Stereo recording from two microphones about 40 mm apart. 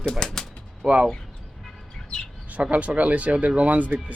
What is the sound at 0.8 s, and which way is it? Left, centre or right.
Speech, centre.